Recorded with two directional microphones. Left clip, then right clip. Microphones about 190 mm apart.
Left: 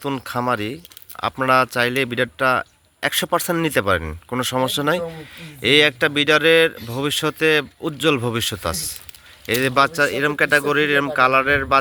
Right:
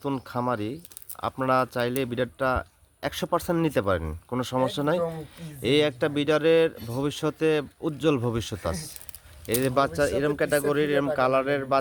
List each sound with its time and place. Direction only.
0.0 s speech: 5° left (ahead or behind)